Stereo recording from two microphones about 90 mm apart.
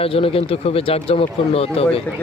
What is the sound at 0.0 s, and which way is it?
Speech, 90° left.